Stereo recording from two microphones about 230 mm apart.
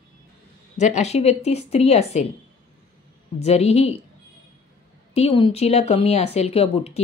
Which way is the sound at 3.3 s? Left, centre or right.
Left.